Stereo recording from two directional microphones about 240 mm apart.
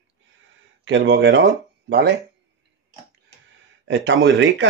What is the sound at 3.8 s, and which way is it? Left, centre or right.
Speech, right.